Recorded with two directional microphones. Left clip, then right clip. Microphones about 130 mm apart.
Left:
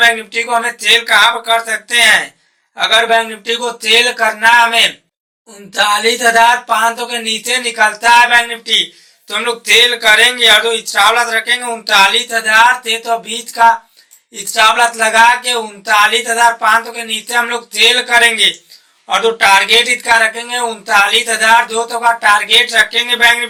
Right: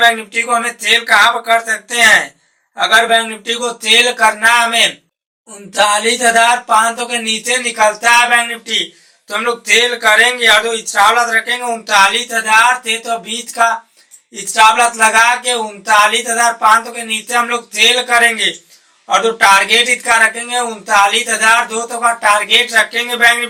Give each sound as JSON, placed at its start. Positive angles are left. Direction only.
{"t": 0.0, "sound": "speech", "side_deg": 30}